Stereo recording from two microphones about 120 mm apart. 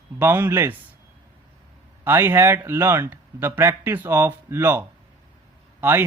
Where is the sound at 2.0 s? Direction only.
20° right (ahead or behind).